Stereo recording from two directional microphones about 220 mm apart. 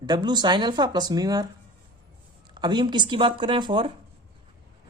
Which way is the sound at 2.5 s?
20° right (ahead or behind).